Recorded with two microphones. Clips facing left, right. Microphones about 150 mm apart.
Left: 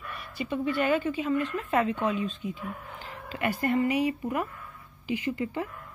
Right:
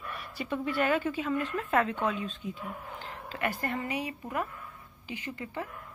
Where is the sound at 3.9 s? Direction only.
10° left (ahead or behind).